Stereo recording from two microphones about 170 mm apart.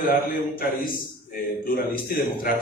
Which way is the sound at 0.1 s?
60° left (ahead or behind).